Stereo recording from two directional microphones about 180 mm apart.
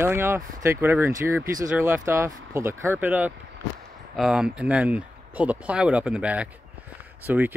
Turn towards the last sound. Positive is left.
turn(degrees=-10)  # may be behind; listen again after turning